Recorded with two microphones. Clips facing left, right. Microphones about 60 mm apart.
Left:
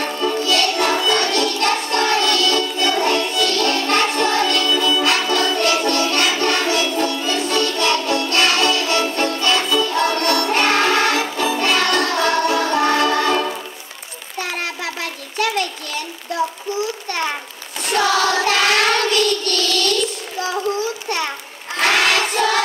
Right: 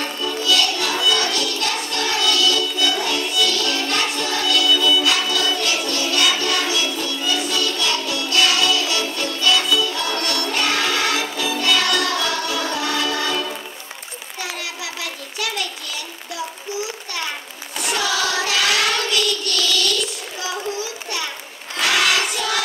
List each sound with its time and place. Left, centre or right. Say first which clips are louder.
0.0 s music: left 4 dB; left
14.4 s a sound: left 5 dB; left
17.9 s child singing: left 6 dB; left
21.7 s crowd: left 2 dB; left